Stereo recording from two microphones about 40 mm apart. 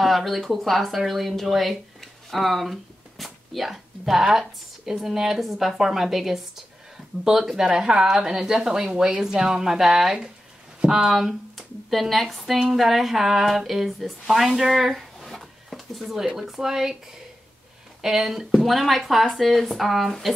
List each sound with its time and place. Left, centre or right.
0.0 s speech: centre
11.1 s speech: centre
18.0 s a woman's voice: centre